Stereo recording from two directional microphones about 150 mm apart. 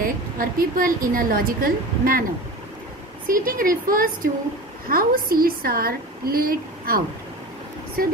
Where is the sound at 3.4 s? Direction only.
70° right (ahead or behind).